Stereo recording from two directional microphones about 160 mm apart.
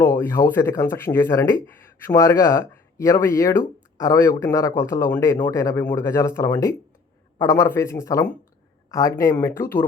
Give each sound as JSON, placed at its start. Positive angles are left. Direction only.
{"t": 0.0, "sound": "speech", "side_deg": 20}